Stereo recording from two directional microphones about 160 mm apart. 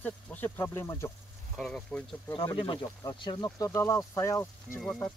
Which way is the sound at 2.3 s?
30° left (ahead or behind).